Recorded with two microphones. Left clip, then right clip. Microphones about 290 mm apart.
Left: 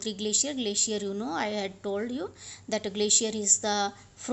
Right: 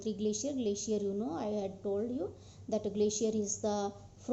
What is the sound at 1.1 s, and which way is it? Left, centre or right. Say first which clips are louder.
Speech: left 3 dB; left.